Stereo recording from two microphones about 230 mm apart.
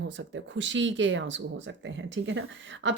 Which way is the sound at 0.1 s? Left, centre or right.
Right.